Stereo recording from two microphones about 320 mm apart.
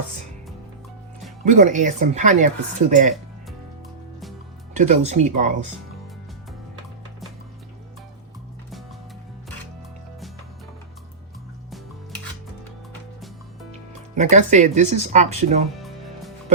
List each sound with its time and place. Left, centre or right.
1.5 s speech: right
4.7 s speech: right
14.2 s speech: right